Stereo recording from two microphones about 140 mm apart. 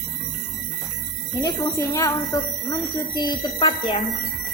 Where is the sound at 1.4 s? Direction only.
25° left (ahead or behind).